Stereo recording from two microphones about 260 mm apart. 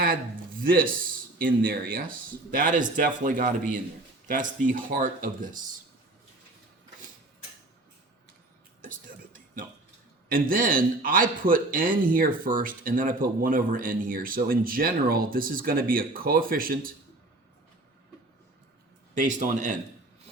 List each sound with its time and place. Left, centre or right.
0.0 s a man's voice: right
8.8 s a sound: right
10.2 s a man's voice: right
19.1 s a man's voice: right